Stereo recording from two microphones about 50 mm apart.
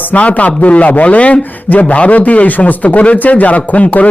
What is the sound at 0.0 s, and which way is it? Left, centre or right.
A man's voice, left.